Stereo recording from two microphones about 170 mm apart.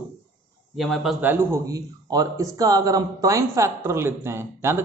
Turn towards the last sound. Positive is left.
turn(degrees=-15)  # may be behind; listen again after turning